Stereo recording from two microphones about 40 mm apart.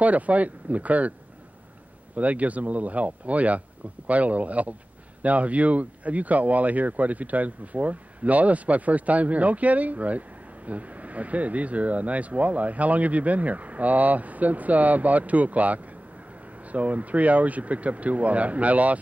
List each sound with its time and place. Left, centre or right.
0.0 s speech: right
2.1 s speech: right